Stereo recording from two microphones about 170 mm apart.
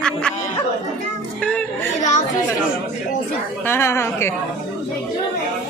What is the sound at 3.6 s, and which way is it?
Speech, 15° left (ahead or behind).